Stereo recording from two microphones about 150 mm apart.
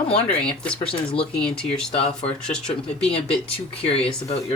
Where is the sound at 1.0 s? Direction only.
40° left (ahead or behind).